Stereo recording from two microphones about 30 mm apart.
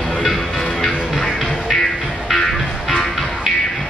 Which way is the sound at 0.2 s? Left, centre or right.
Centre.